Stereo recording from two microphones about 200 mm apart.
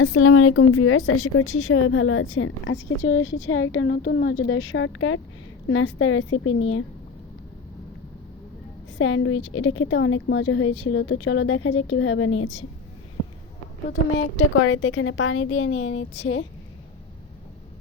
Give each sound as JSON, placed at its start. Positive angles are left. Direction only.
{"t": 0.0, "sound": "a woman's voice", "side_deg": 90}
{"t": 3.0, "sound": "speech", "side_deg": 75}
{"t": 3.8, "sound": "a woman's voice", "side_deg": 55}
{"t": 9.0, "sound": "a woman's voice", "side_deg": 90}
{"t": 14.2, "sound": "a woman's voice", "side_deg": 90}